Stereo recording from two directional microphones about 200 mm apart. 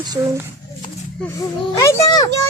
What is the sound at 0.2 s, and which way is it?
Speech, 15° right (ahead or behind).